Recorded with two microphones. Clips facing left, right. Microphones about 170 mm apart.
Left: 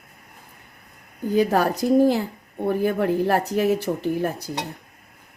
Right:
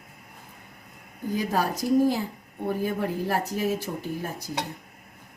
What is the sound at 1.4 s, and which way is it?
A woman's voice, 65° left (ahead or behind).